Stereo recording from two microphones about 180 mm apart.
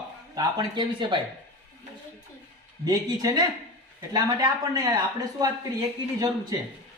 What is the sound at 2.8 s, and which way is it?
Speech, 20° right (ahead or behind).